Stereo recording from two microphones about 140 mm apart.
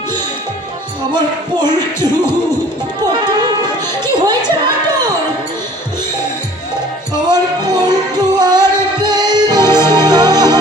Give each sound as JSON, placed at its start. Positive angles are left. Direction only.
{"t": 1.1, "sound": "music", "side_deg": -30}
{"t": 4.0, "sound": "speech", "side_deg": -30}
{"t": 7.3, "sound": "music", "side_deg": -30}